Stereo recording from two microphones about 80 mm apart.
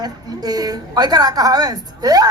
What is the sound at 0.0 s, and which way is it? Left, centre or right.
A woman's voice, right.